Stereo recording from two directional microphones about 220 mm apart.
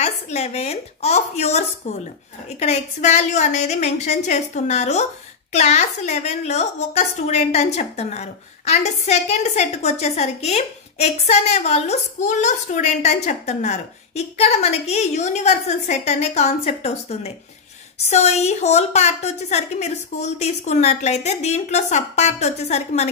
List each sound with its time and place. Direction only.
0.0 s a woman's voice: 30° left (ahead or behind)